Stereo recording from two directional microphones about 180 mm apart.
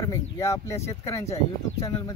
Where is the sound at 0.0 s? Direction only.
15° left (ahead or behind).